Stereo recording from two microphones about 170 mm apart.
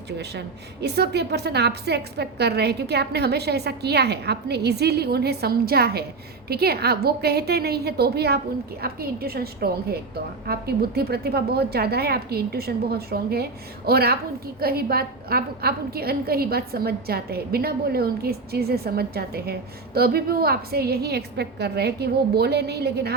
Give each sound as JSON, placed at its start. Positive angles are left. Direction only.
{"t": 0.2, "sound": "a woman's voice", "side_deg": -75}